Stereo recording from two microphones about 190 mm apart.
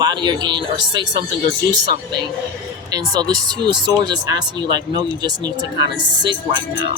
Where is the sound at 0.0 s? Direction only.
25° right (ahead or behind).